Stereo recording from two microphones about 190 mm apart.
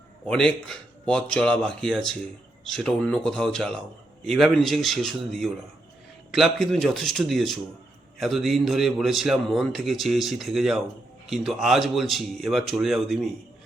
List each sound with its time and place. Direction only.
0.3 s a man's voice: 5° left (ahead or behind)